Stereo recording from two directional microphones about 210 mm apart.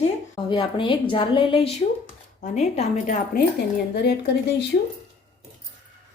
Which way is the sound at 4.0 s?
50° left (ahead or behind).